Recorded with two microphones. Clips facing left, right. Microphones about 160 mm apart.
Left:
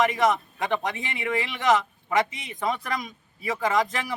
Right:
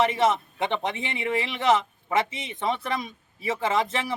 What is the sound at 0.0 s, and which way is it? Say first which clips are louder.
Speech: even; 25° right (ahead or behind).